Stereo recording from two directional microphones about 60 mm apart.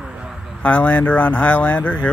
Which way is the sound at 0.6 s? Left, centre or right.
Left.